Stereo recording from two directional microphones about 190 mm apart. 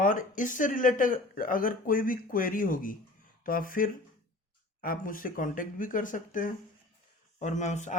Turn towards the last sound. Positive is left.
turn(degrees=40)  # may be behind; listen again after turning